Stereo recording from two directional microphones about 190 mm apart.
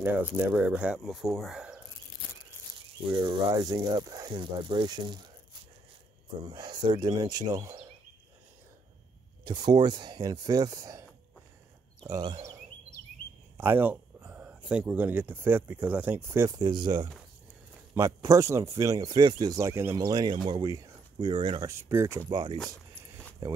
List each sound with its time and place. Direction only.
0.0 s speech: 10° right (ahead or behind)
3.1 s speech: 25° right (ahead or behind)
6.4 s speech: 25° right (ahead or behind)
9.4 s speech: 20° right (ahead or behind)
13.6 s speech: 10° right (ahead or behind)